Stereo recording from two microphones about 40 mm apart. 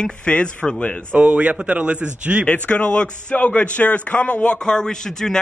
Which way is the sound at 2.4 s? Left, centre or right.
Left.